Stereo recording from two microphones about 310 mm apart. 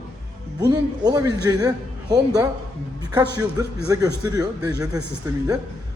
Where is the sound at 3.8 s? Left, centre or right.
Centre.